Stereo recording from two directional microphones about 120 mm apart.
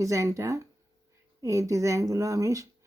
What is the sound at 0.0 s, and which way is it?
Speech, 25° right (ahead or behind).